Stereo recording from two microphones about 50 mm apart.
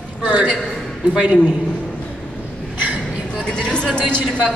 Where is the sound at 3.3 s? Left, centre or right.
Centre.